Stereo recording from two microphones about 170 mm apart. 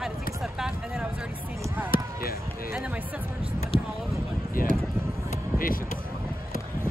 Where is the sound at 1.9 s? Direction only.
60° left (ahead or behind).